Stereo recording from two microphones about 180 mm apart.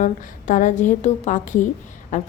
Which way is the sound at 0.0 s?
45° left (ahead or behind).